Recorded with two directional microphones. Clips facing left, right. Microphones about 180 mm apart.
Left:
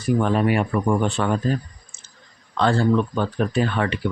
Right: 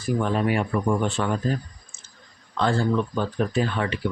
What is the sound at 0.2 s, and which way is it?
Speech, 65° left (ahead or behind).